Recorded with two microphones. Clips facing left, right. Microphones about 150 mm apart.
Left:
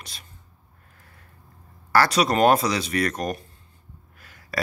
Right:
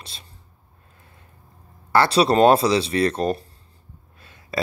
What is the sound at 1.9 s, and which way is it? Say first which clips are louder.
Speech: right 3 dB; 30° right (ahead or behind).